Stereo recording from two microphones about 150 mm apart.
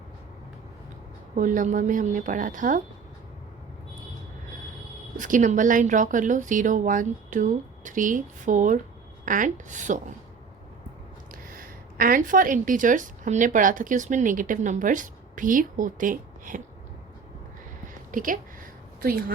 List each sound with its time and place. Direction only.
1.4 s a woman's voice: 60° right (ahead or behind)
5.1 s a woman's voice: 60° right (ahead or behind)
11.4 s speech: 70° right (ahead or behind)
18.1 s a woman's voice: 65° right (ahead or behind)